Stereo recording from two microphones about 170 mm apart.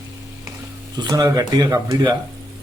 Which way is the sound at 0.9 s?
20° right (ahead or behind).